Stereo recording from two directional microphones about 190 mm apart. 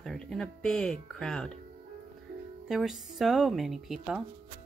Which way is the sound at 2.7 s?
Centre (ahead or behind).